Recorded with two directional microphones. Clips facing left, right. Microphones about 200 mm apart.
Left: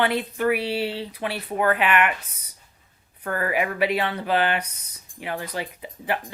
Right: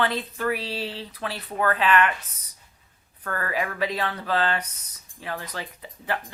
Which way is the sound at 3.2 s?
15° left (ahead or behind).